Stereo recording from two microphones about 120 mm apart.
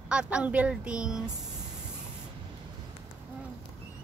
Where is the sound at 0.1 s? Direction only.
10° right (ahead or behind).